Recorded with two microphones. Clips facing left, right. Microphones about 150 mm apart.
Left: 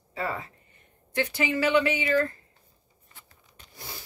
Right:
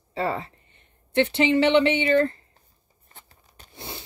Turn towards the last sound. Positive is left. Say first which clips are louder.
# right 5 dB
turn(degrees=-25)  # may be behind; listen again after turning